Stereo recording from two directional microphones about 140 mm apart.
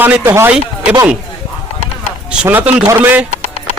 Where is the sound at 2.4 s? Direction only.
10° right (ahead or behind).